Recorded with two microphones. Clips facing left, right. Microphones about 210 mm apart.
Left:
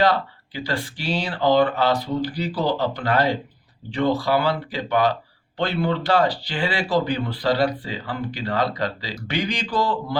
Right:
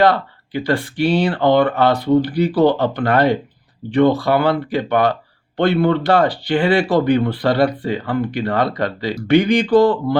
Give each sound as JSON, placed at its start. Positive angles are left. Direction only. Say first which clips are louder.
{"t": 0.0, "sound": "speech", "louder": "right 5 dB", "side_deg": -60}